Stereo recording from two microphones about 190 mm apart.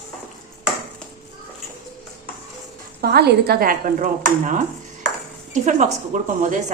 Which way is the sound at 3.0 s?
55° right (ahead or behind).